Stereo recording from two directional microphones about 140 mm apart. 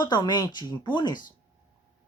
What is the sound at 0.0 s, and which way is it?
Speech, 30° left (ahead or behind).